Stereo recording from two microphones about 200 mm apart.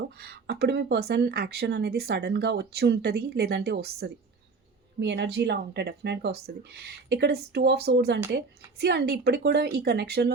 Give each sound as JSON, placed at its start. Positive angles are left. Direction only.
{"t": 0.2, "sound": "speech", "side_deg": -50}